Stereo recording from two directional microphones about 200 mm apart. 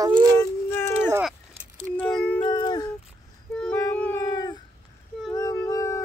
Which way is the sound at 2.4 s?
20° left (ahead or behind).